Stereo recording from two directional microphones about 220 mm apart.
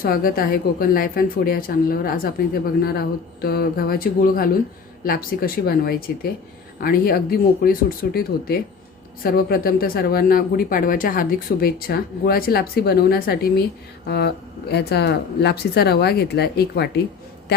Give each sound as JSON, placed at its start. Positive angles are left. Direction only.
{"t": 0.0, "sound": "a woman's voice", "side_deg": 40}